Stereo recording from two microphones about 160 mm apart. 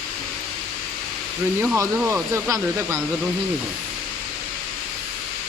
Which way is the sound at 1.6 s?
15° right (ahead or behind).